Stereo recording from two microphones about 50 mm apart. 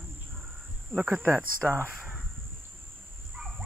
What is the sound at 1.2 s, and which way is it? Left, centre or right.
Speech, right.